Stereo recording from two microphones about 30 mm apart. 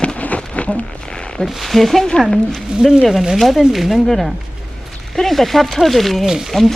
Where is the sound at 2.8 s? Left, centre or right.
Centre.